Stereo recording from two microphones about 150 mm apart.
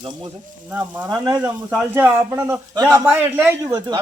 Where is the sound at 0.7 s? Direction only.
10° right (ahead or behind).